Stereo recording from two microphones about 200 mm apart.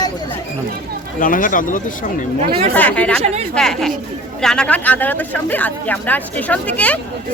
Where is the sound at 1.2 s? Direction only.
40° left (ahead or behind).